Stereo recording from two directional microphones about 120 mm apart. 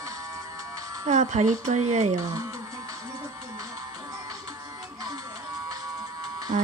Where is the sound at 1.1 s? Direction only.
80° right.